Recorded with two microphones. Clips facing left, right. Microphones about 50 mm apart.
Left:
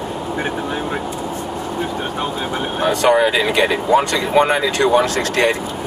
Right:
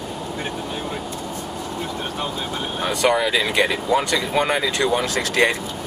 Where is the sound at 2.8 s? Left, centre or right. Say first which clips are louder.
Left 5 dB; left.